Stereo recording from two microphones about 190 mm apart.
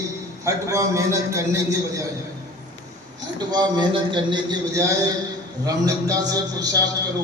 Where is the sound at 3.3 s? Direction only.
20° right (ahead or behind).